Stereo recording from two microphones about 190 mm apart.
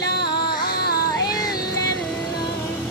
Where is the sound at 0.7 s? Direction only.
55° left (ahead or behind).